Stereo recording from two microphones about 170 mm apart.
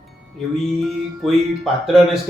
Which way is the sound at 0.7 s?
Centre (ahead or behind).